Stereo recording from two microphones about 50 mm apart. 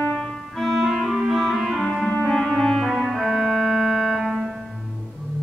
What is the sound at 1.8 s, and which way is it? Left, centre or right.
Music, centre.